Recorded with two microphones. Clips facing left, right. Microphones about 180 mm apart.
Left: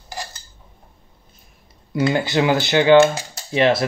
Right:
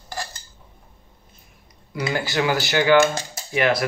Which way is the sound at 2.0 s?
20° left (ahead or behind).